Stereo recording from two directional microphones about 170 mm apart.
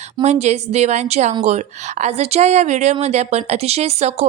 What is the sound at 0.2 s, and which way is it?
Speech, 40° right (ahead or behind).